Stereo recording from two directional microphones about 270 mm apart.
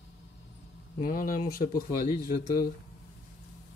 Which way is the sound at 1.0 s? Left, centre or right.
Left.